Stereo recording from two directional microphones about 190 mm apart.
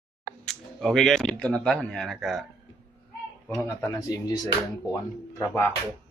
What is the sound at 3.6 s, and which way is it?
Speech, 15° left (ahead or behind).